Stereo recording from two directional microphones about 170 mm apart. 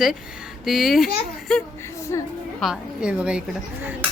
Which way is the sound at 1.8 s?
15° left (ahead or behind).